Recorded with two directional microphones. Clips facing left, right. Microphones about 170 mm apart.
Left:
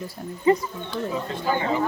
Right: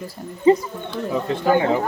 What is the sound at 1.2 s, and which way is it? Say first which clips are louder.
Speech: right 10 dB; 60° right (ahead or behind).